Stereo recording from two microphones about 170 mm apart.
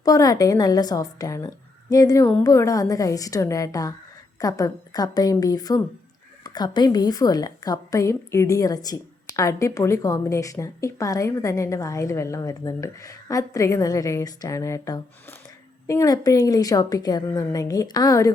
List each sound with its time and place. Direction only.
0.0 s a woman's voice: 20° left (ahead or behind)